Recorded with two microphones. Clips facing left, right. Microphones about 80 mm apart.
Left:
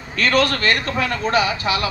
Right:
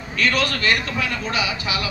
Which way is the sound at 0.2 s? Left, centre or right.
Left.